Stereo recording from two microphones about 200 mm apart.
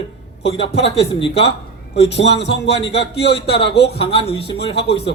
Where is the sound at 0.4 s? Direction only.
30° left (ahead or behind).